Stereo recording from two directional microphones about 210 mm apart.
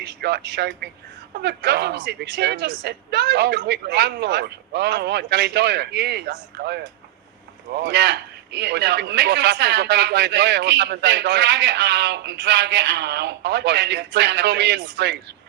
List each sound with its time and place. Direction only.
0.0 s a man's voice: 50° right (ahead or behind)